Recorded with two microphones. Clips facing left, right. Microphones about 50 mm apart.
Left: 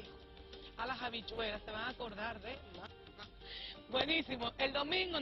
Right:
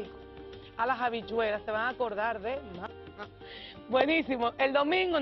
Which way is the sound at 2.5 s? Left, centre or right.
Right.